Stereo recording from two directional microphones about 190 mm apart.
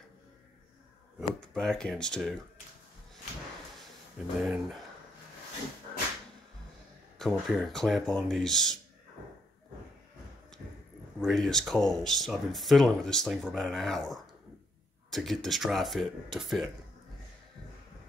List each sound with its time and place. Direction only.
1.5 s speech: 5° left (ahead or behind)
4.4 s speech: 5° right (ahead or behind)
7.2 s speech: centre (ahead or behind)
11.1 s speech: centre (ahead or behind)